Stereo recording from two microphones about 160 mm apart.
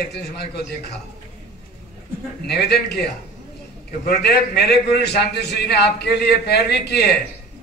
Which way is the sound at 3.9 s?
80° left.